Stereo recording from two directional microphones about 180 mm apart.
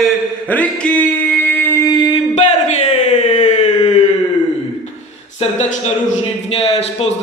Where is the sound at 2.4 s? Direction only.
40° left (ahead or behind).